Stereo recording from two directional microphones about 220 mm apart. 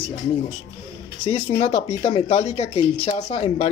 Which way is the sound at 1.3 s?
30° left (ahead or behind).